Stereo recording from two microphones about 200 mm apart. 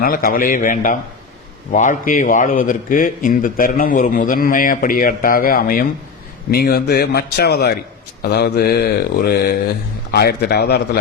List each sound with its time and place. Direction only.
0.0 s a man's voice: 45° left (ahead or behind)